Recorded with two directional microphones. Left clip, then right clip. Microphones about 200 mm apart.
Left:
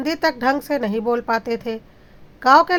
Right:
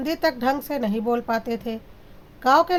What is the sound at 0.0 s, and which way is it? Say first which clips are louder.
Speech: left 3 dB; 20° left (ahead or behind).